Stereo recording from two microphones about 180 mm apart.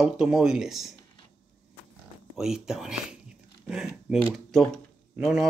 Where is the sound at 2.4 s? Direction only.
5° right (ahead or behind).